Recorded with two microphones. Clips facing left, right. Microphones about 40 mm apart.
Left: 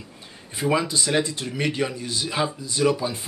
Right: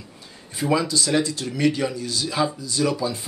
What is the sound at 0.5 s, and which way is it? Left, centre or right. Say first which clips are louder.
Speech: right 1 dB; left.